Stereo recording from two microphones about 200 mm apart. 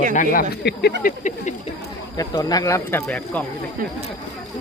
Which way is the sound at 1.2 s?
35° left (ahead or behind).